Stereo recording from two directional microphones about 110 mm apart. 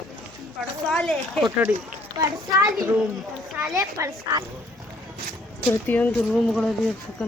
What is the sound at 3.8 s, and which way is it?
Speech, 30° right (ahead or behind).